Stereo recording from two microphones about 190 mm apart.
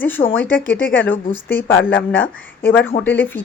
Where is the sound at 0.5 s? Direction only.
80° left.